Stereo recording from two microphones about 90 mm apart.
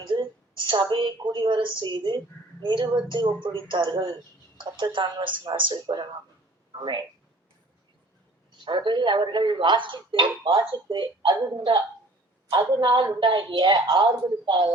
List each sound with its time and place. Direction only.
0.6 s speech: 60° right (ahead or behind)
8.6 s speech: 60° right (ahead or behind)